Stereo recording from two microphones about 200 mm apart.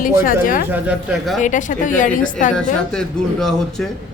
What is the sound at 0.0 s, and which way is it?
Speech, 45° left (ahead or behind).